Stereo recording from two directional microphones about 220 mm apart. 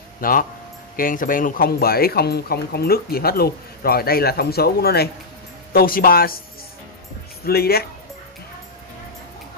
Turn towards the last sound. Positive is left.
turn(degrees=45)  # may be behind; listen again after turning